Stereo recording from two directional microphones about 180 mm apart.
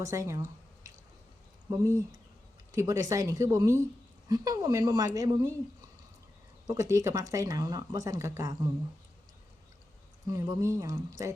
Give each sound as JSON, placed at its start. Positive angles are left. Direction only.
{"t": 0.0, "sound": "a sound", "side_deg": -15}
{"t": 1.7, "sound": "a woman's voice", "side_deg": -20}
{"t": 6.7, "sound": "speech", "side_deg": -15}
{"t": 10.2, "sound": "speech", "side_deg": -20}